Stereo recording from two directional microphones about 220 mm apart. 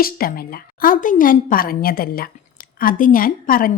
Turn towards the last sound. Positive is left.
turn(degrees=40)  # may be behind; listen again after turning